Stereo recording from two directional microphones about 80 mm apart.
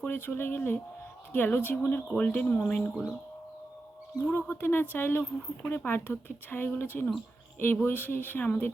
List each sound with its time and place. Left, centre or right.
0.0 s speech: left
4.2 s speech: left